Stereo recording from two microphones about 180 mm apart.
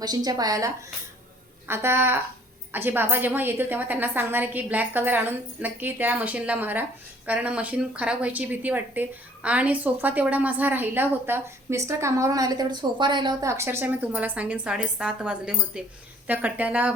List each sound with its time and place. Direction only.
0.3 s a woman's voice: 20° right (ahead or behind)